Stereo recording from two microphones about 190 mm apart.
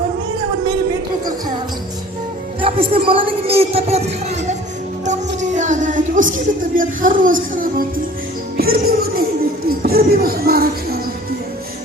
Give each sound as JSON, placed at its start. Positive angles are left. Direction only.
{"t": 2.6, "sound": "a man's voice", "side_deg": -30}
{"t": 5.0, "sound": "music", "side_deg": -40}
{"t": 6.7, "sound": "speech", "side_deg": -45}
{"t": 8.5, "sound": "music", "side_deg": -55}
{"t": 9.6, "sound": "a sound", "side_deg": -55}